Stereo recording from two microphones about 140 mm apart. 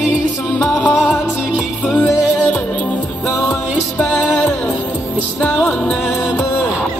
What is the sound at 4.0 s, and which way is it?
Music, centre (ahead or behind).